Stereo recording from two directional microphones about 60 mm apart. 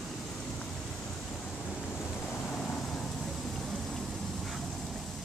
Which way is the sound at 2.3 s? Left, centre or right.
Centre.